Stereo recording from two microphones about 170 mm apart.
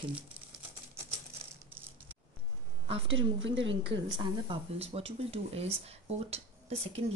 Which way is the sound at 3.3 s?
90° right.